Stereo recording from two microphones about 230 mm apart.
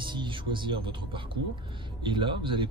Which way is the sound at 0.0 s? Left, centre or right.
Right.